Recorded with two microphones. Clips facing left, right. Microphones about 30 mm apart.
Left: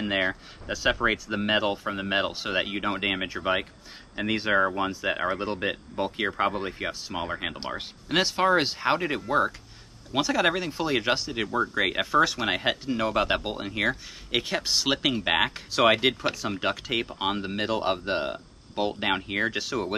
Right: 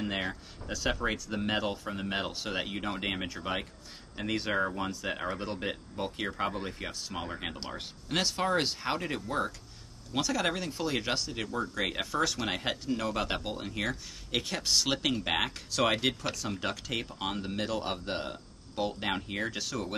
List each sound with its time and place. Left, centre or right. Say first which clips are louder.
0.0 s speech: left 7 dB; left